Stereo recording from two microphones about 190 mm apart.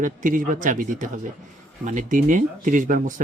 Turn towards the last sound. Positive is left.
turn(degrees=-45)  # may be behind; listen again after turning